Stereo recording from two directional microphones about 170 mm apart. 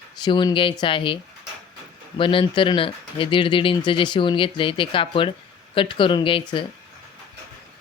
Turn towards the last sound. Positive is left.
turn(degrees=30)  # may be behind; listen again after turning